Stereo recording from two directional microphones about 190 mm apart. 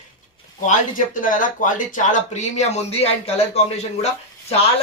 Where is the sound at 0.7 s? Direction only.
45° left (ahead or behind).